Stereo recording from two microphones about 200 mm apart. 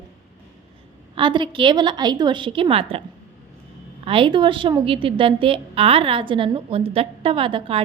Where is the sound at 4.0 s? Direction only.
25° right (ahead or behind).